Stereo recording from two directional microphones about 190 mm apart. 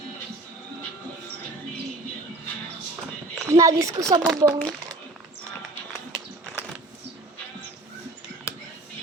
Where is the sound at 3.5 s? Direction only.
15° right (ahead or behind).